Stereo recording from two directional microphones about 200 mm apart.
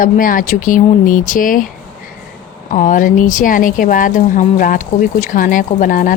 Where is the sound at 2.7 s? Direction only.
40° left (ahead or behind).